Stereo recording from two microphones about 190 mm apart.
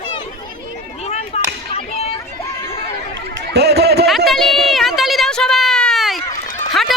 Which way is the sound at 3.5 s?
60° right (ahead or behind).